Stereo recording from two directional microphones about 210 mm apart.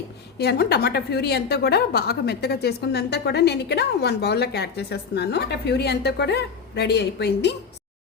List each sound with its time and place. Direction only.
0.3 s a woman's voice: 50° left (ahead or behind)